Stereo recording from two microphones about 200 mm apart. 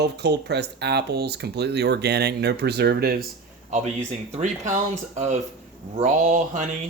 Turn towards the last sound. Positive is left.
turn(degrees=-40)  # may be behind; listen again after turning